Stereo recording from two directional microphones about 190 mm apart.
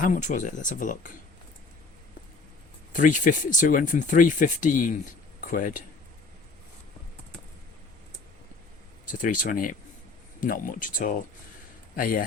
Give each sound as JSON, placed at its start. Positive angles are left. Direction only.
{"t": 0.0, "sound": "speech", "side_deg": 40}
{"t": 2.9, "sound": "speech", "side_deg": 45}
{"t": 9.1, "sound": "speech", "side_deg": 45}